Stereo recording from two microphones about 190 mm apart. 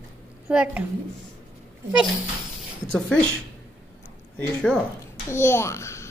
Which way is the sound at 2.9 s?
5° left (ahead or behind).